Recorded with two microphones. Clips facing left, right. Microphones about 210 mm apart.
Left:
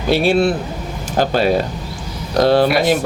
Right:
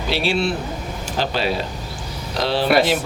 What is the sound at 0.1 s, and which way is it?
Speech, 50° left (ahead or behind).